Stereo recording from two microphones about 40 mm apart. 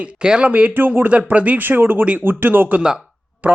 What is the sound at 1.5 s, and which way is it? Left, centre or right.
Speech, right.